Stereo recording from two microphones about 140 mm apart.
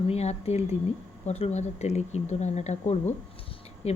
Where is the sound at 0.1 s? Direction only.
50° left (ahead or behind).